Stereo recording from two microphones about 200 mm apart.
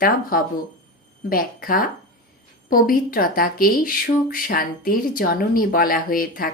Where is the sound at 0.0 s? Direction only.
45° left (ahead or behind).